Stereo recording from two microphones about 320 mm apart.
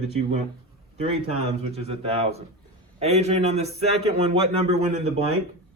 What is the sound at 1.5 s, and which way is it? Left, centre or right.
Speech, centre.